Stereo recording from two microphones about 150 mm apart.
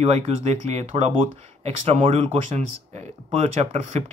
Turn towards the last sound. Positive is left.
turn(degrees=-45)  # may be behind; listen again after turning